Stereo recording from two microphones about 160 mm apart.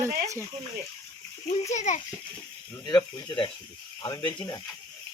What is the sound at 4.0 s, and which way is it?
Speech, 25° left (ahead or behind).